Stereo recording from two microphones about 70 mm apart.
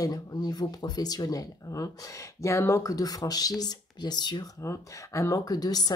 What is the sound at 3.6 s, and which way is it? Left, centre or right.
Speech, left.